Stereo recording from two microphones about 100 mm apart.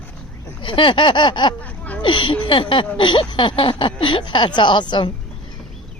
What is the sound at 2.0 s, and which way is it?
A woman's voice, 55° left (ahead or behind).